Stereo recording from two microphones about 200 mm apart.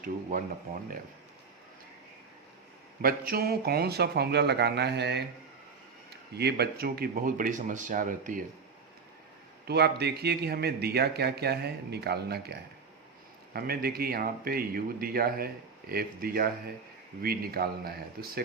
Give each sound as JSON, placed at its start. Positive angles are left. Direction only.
{"t": 0.0, "sound": "speech", "side_deg": -40}
{"t": 3.0, "sound": "speech", "side_deg": -45}
{"t": 9.6, "sound": "speech", "side_deg": -55}